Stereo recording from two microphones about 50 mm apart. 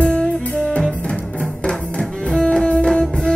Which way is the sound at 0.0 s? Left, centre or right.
Centre.